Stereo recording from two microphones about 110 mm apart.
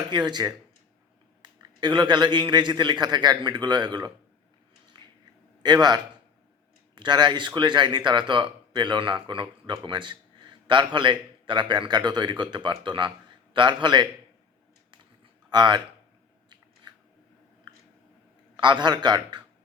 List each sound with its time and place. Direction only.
0.1 s a man's voice: 40° right (ahead or behind)
5.6 s a man's voice: 40° right (ahead or behind)
14.8 s typing: 45° right (ahead or behind)
17.7 s a sound: 40° right (ahead or behind)
18.5 s speech: 45° right (ahead or behind)